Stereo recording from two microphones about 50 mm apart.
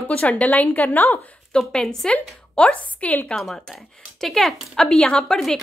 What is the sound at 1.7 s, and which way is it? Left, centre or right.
A woman's voice, centre.